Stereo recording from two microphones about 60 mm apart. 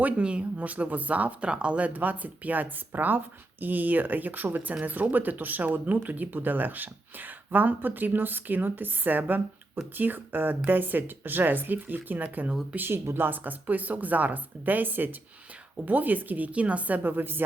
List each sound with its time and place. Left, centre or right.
0.0 s speech: centre; by 17.4 s right